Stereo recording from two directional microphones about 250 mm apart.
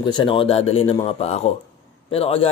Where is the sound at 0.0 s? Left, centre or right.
Centre.